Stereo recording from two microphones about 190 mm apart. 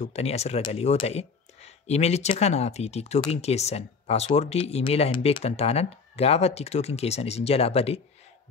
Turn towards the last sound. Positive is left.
turn(degrees=30)  # may be behind; listen again after turning